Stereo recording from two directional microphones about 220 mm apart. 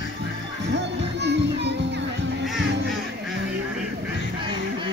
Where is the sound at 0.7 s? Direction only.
50° right (ahead or behind).